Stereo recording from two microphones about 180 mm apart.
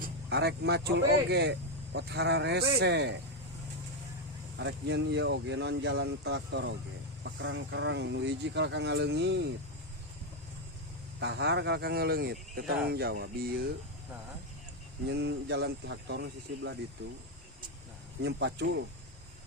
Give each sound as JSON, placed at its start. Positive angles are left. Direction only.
{"t": 0.3, "sound": "speech", "side_deg": -65}
{"t": 4.5, "sound": "speech", "side_deg": -85}
{"t": 7.3, "sound": "speech", "side_deg": -90}
{"t": 11.2, "sound": "speech", "side_deg": -75}
{"t": 15.1, "sound": "speech", "side_deg": -70}
{"t": 18.2, "sound": "speech", "side_deg": -70}